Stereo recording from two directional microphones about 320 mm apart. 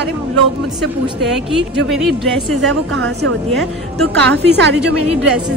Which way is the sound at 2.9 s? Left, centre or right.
Right.